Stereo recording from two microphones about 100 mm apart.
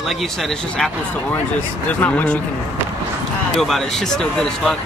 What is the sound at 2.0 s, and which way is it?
Speech, 20° left (ahead or behind).